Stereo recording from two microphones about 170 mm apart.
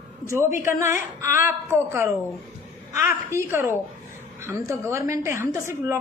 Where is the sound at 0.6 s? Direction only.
15° right (ahead or behind).